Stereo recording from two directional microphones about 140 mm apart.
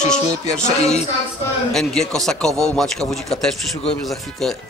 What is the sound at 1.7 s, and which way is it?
Speech, 5° left (ahead or behind).